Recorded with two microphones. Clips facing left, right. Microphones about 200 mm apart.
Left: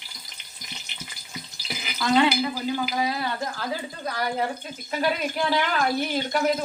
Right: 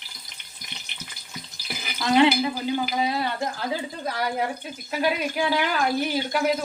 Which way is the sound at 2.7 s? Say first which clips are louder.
Right 1 dB; 25° right (ahead or behind).